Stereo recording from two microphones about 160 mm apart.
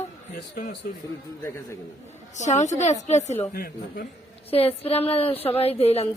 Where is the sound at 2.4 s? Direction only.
45° left (ahead or behind).